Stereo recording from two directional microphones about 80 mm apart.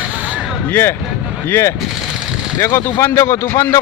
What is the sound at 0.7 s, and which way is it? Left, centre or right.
A man's voice, left.